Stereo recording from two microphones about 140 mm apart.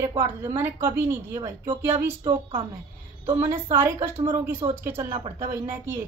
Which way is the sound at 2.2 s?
40° right (ahead or behind).